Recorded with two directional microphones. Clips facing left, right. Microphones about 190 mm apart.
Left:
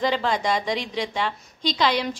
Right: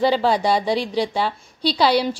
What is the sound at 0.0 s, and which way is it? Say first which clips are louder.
A woman's voice: right 5 dB; 35° right (ahead or behind).